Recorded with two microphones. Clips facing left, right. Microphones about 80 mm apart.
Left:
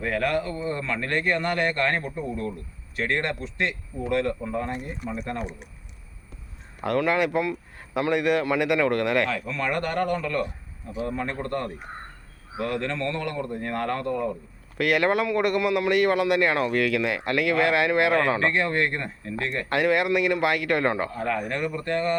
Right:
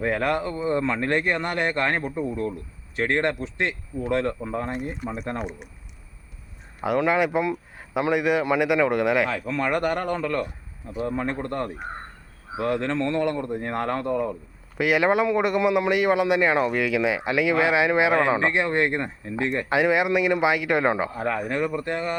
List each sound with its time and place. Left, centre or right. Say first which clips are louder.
0.0 s speech: right 1 dB; right
6.8 s a man's voice: right 1 dB; centre
8.1 s a man's voice: right 1 dB; centre
9.3 s speech: right 3 dB; right
14.8 s a man's voice: right 2 dB; centre